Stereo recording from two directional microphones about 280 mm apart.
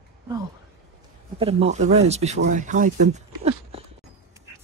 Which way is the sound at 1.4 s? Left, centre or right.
Right.